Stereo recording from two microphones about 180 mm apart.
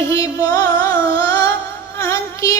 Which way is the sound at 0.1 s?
20° left (ahead or behind).